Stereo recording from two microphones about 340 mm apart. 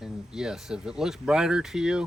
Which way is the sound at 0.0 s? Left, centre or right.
Centre.